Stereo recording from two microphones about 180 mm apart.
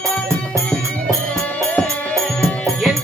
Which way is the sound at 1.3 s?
10° left (ahead or behind).